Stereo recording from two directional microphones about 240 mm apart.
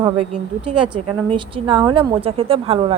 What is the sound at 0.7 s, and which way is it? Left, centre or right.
Speech, right.